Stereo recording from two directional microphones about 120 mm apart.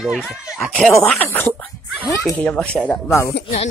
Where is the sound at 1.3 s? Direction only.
20° left (ahead or behind).